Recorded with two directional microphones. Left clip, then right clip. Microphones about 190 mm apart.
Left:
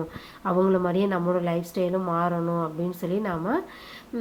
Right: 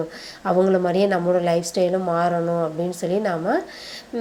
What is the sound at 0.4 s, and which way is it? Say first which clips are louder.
A woman's voice: right 5 dB; 20° right (ahead or behind).